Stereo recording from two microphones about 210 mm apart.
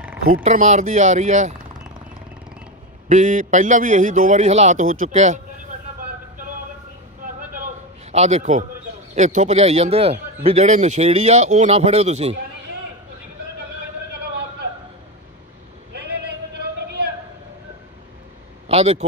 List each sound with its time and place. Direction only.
0.3 s a man's voice: 35° right (ahead or behind)
3.1 s a man's voice: 35° right (ahead or behind)
8.1 s a man's voice: 30° right (ahead or behind)
18.7 s speech: 30° right (ahead or behind)